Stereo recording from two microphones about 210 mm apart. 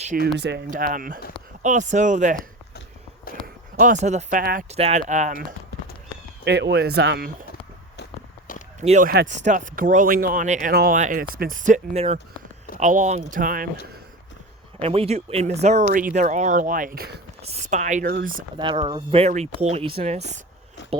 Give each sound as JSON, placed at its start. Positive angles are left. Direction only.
{"t": 0.0, "sound": "speech", "side_deg": -35}
{"t": 0.3, "sound": "speech", "side_deg": -50}
{"t": 6.4, "sound": "speech", "side_deg": -55}
{"t": 8.8, "sound": "speech", "side_deg": -35}
{"t": 14.8, "sound": "speech", "side_deg": -30}
{"t": 17.4, "sound": "speech", "side_deg": -30}
{"t": 18.5, "sound": "speech", "side_deg": -20}